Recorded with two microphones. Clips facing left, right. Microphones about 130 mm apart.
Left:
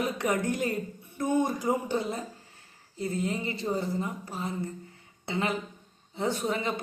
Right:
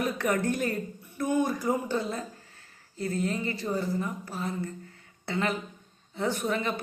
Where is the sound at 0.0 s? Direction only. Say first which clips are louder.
Right 1 dB; 20° left (ahead or behind).